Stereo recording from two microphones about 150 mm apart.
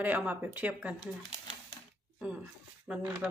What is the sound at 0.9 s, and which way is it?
Speech, 30° left (ahead or behind).